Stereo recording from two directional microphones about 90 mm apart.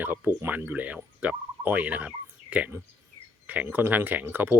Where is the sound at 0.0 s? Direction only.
20° right (ahead or behind).